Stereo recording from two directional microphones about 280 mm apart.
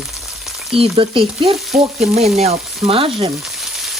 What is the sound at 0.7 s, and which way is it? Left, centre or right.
Frying, centre.